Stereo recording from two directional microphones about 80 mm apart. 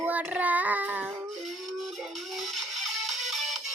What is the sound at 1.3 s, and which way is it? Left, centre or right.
Music, centre.